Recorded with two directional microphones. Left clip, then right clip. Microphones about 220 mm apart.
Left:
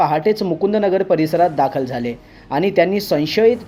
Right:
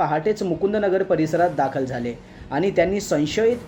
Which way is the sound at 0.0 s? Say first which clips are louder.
Left 5 dB; 30° left (ahead or behind).